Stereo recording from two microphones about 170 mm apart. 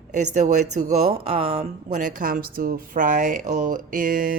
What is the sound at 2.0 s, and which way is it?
Speech, 50° right (ahead or behind).